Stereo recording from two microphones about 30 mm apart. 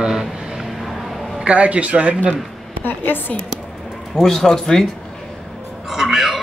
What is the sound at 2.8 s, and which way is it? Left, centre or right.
Speech, left.